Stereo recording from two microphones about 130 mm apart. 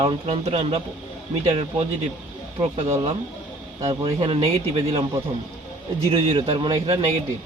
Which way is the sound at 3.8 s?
35° right (ahead or behind).